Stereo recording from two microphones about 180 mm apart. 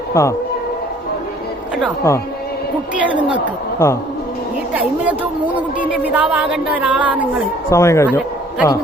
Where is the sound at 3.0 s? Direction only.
10° right (ahead or behind).